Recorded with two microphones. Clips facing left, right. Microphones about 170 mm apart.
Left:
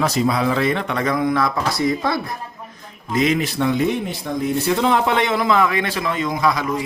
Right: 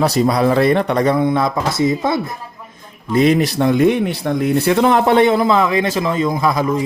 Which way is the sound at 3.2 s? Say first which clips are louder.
Right 5 dB; 35° right (ahead or behind).